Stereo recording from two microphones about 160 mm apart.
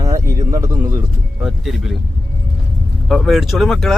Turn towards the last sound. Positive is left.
turn(degrees=0)  # may be behind; listen again after turning